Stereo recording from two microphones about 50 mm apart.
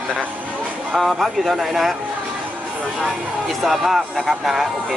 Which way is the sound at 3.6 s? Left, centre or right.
Centre.